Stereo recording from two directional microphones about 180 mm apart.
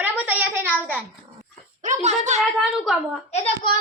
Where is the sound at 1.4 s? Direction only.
40° right (ahead or behind).